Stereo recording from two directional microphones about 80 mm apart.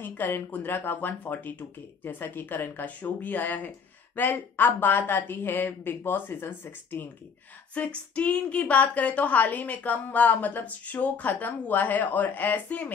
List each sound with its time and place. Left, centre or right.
0.0 s speech: left